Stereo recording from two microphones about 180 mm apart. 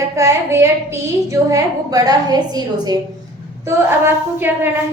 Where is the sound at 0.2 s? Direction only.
15° right (ahead or behind).